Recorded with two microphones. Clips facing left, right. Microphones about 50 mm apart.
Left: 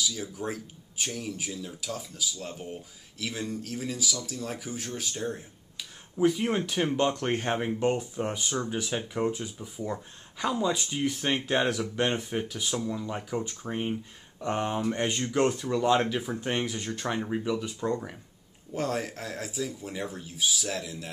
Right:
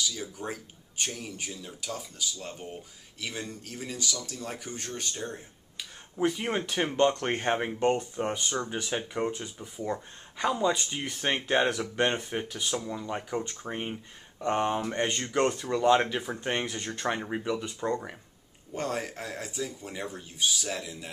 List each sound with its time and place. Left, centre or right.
0.0 s speech: centre
17.0 s speech: centre
17.6 s speech: centre